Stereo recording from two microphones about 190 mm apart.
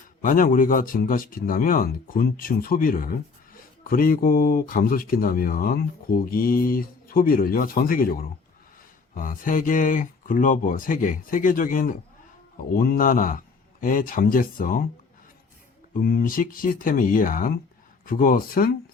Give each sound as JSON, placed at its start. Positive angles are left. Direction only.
{"t": 0.2, "sound": "speech", "side_deg": 45}
{"t": 15.9, "sound": "speech", "side_deg": 50}